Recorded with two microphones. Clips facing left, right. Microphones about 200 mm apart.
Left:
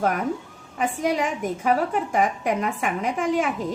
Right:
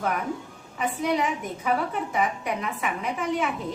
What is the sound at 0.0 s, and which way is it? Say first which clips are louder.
A woman's voice: left 4 dB; 45° left (ahead or behind).